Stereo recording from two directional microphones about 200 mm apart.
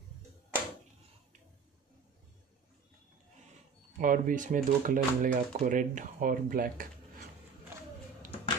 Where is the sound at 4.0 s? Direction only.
40° right (ahead or behind).